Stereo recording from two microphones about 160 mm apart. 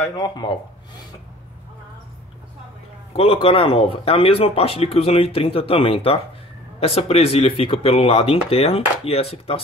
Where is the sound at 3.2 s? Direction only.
35° left (ahead or behind).